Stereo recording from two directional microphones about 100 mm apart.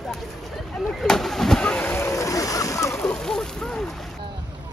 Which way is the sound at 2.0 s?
30° left (ahead or behind).